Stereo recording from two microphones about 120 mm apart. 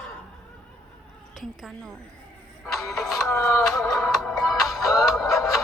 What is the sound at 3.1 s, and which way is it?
Music, 25° left (ahead or behind).